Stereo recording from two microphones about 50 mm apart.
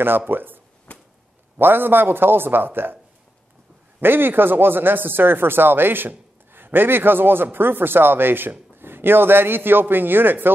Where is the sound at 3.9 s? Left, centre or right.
Right.